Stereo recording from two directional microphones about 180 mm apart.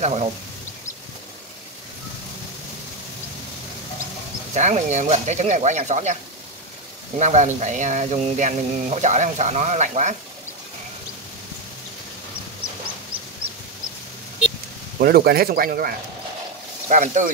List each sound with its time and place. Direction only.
0.0 s speech: 35° right (ahead or behind)
4.6 s speech: 40° right (ahead or behind)
7.2 s speech: 45° right (ahead or behind)
15.0 s speech: 60° right (ahead or behind)
16.9 s speech: 45° right (ahead or behind)